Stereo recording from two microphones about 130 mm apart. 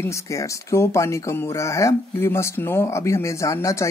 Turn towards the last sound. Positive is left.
turn(degrees=25)  # may be behind; listen again after turning